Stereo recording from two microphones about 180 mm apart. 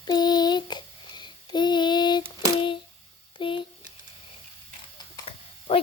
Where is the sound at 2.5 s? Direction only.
25° left (ahead or behind).